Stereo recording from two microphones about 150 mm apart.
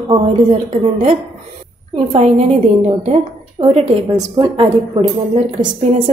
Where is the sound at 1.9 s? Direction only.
45° right (ahead or behind).